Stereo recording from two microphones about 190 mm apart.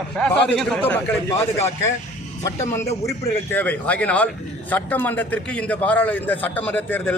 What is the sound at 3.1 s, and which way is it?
A man's voice, 10° left (ahead or behind).